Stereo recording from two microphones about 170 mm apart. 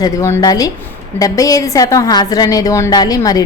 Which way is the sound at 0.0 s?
15° left (ahead or behind).